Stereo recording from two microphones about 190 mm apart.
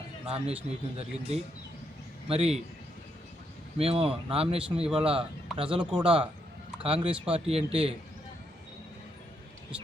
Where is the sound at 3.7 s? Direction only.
30° right (ahead or behind).